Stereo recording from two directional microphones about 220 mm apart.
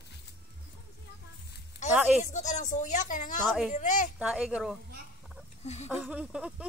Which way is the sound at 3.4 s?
Centre (ahead or behind).